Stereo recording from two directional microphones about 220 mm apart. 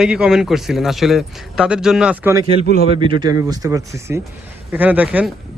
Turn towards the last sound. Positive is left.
turn(degrees=-5)  # may be behind; listen again after turning